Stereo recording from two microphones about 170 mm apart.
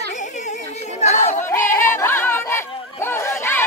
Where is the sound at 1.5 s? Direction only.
15° left (ahead or behind).